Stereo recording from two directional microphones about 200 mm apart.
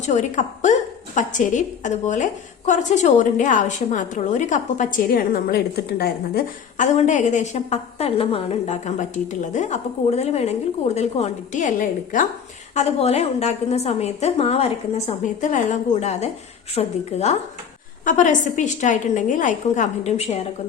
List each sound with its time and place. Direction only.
0.0 s a woman's voice: 35° left (ahead or behind)